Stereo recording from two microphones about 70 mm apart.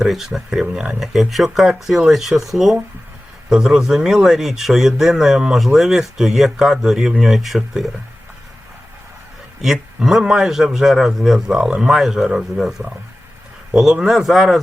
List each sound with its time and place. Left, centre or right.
0.0 s speech: centre
9.6 s speech: centre
13.7 s speech: centre